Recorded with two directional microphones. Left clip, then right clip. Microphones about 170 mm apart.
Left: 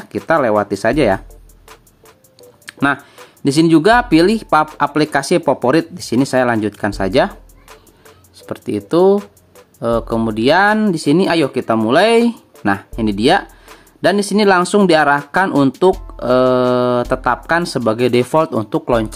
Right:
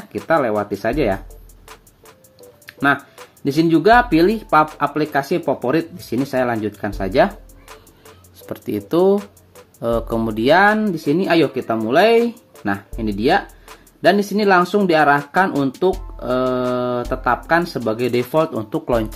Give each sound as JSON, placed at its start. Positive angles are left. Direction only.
{"t": 0.3, "sound": "speech", "side_deg": 35}
{"t": 2.6, "sound": "music", "side_deg": 35}
{"t": 3.4, "sound": "speech", "side_deg": 35}
{"t": 8.4, "sound": "speech", "side_deg": 20}
{"t": 9.1, "sound": "music", "side_deg": 0}
{"t": 9.8, "sound": "speech", "side_deg": 20}
{"t": 10.8, "sound": "speech", "side_deg": 40}
{"t": 18.7, "sound": "speech", "side_deg": 20}